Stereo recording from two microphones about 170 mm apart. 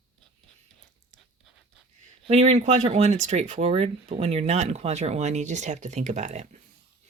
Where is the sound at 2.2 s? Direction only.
40° right (ahead or behind).